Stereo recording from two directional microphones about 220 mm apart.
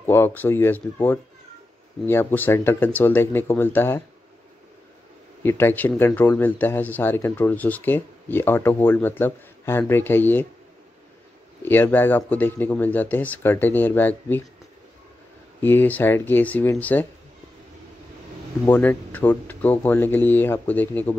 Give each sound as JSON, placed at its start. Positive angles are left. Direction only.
{"t": 0.0, "sound": "speech", "side_deg": 10}
{"t": 5.4, "sound": "speech", "side_deg": 10}
{"t": 11.6, "sound": "speech", "side_deg": 10}
{"t": 15.6, "sound": "speech", "side_deg": 10}
{"t": 18.7, "sound": "speech", "side_deg": 10}